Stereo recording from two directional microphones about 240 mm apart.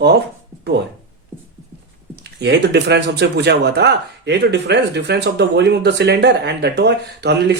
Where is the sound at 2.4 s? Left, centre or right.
Right.